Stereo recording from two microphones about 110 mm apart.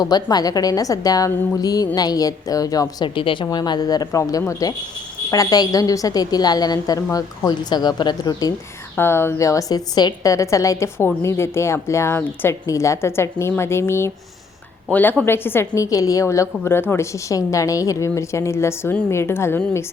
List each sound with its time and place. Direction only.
0.0 s a woman's voice: 35° left (ahead or behind)
3.2 s a woman's voice: 50° left (ahead or behind)
9.0 s a woman's voice: 20° left (ahead or behind)